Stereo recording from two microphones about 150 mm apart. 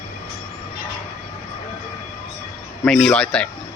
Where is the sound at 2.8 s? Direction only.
5° left (ahead or behind).